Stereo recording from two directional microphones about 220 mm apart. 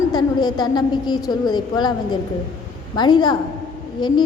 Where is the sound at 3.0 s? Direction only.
20° left (ahead or behind).